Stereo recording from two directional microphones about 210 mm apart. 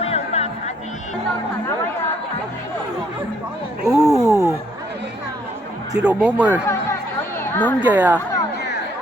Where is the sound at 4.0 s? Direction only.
15° right (ahead or behind).